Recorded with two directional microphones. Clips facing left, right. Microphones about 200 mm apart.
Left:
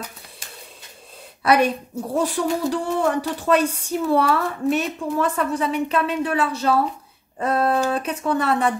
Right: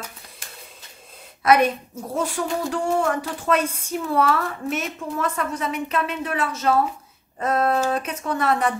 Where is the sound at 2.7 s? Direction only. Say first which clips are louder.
Left 1 dB; 35° left (ahead or behind).